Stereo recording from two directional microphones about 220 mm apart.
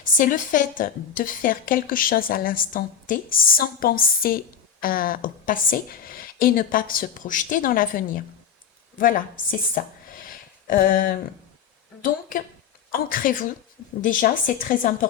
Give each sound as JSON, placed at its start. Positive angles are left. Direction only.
{"t": 0.0, "sound": "a woman's voice", "side_deg": 35}
{"t": 12.9, "sound": "a woman's voice", "side_deg": 40}